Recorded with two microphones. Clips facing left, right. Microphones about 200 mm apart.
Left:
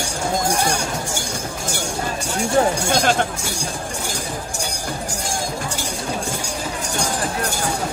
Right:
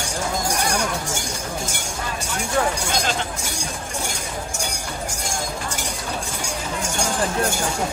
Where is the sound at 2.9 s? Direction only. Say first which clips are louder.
Left 6 dB; 55° left (ahead or behind).